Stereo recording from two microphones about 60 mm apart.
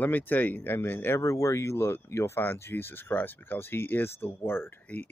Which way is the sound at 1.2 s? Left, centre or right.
Left.